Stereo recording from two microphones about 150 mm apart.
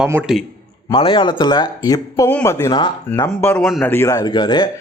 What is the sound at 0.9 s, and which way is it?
Speech, 35° left (ahead or behind).